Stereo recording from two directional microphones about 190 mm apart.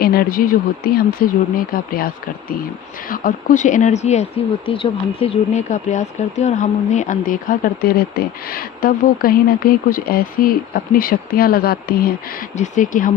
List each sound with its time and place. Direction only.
0.0 s speech: 55° left (ahead or behind)
12.5 s speech: 40° left (ahead or behind)